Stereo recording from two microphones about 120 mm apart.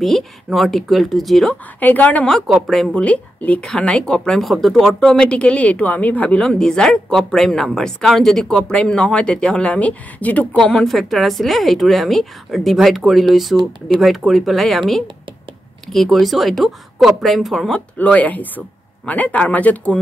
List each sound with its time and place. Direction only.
0.0 s a woman's voice: centre (ahead or behind)
1.8 s speech: 15° left (ahead or behind)
2.3 s a woman's voice: centre (ahead or behind)